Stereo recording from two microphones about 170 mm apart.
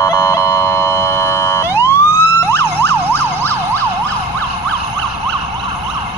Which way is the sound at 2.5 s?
10° left (ahead or behind).